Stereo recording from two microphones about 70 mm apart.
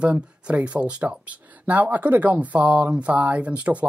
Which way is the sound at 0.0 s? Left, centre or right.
Centre.